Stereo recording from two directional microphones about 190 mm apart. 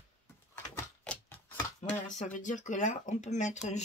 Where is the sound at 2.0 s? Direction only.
40° left (ahead or behind).